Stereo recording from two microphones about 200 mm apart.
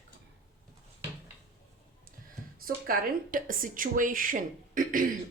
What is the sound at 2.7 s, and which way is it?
A woman's voice, 45° right (ahead or behind).